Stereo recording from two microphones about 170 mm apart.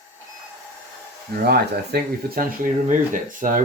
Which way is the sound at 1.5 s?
70° right (ahead or behind).